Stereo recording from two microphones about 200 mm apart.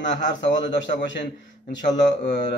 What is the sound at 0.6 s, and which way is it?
Speech, 60° left (ahead or behind).